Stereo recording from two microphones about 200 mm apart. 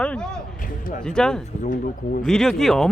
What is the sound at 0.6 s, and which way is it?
Speech, 45° left (ahead or behind).